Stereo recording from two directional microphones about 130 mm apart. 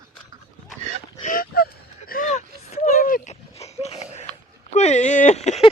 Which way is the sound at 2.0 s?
90° left.